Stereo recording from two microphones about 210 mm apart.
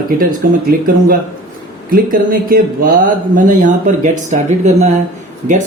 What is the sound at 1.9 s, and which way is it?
Speech, 40° right (ahead or behind).